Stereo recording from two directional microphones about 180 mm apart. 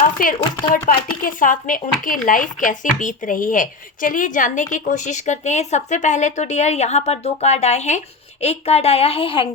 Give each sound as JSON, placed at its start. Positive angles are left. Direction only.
{"t": 0.7, "sound": "speech", "side_deg": 50}